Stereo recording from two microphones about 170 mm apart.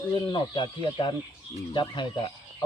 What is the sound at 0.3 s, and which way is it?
Speech, 25° left (ahead or behind).